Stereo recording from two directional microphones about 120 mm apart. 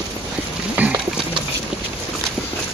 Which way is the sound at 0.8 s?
15° right (ahead or behind).